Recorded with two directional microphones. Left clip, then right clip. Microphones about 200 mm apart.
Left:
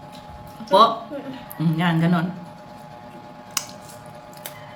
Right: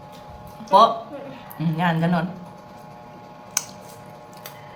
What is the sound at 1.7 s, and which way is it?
Speech, 15° right (ahead or behind).